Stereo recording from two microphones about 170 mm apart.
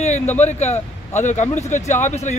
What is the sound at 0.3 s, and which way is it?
Speech, 40° left (ahead or behind).